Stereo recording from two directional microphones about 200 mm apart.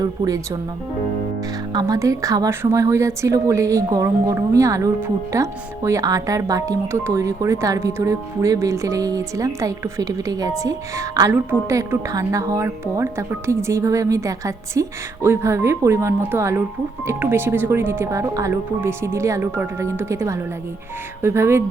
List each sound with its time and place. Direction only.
1.7 s a woman's voice: 20° right (ahead or behind)